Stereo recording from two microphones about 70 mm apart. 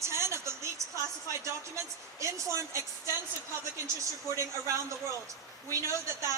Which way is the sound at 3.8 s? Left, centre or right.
Right.